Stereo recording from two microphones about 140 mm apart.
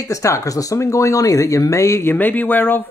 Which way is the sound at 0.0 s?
20° left (ahead or behind).